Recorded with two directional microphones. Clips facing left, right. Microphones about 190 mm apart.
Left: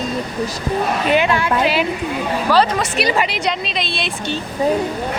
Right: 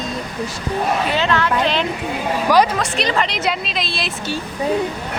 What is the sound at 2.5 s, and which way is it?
Speech, 15° right (ahead or behind).